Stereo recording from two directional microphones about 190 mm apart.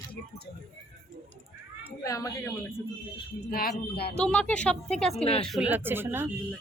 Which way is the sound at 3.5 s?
50° left (ahead or behind).